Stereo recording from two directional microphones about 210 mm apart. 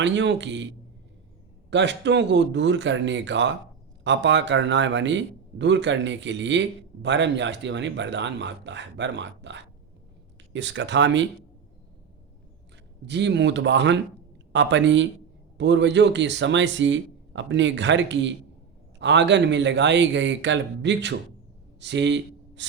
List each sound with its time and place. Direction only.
0.0 s a man's voice: 60° right (ahead or behind)
1.7 s a man's voice: 55° right (ahead or behind)
13.1 s a man's voice: 55° right (ahead or behind)
21.8 s a sound: 55° right (ahead or behind)